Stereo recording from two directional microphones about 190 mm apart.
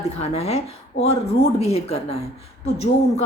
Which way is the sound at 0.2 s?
35° left (ahead or behind).